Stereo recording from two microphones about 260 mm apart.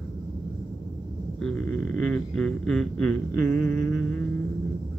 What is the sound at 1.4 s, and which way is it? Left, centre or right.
Speech, centre.